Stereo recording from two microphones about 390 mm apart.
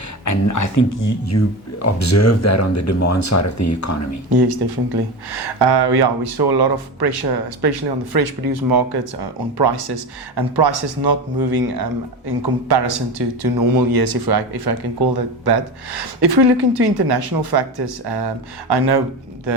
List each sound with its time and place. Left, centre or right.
0.3 s speech: left
4.3 s speech: right
5.3 s speech: right